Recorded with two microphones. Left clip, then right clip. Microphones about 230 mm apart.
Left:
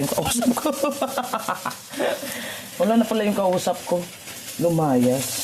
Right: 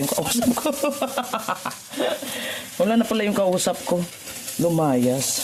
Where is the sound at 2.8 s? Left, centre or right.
Right.